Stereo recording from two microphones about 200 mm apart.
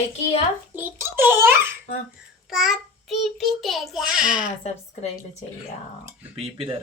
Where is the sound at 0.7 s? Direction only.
10° right (ahead or behind).